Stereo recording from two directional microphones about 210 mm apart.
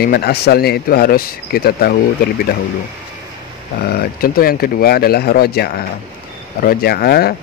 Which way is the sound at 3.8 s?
50° left (ahead or behind).